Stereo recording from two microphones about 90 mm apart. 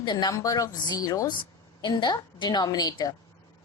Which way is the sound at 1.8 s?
55° left (ahead or behind).